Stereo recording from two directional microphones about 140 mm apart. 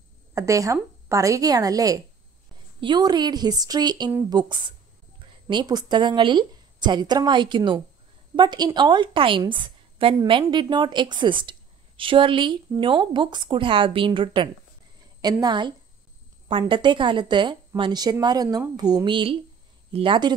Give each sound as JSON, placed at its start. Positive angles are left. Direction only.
{"t": 0.3, "sound": "a woman's voice", "side_deg": -20}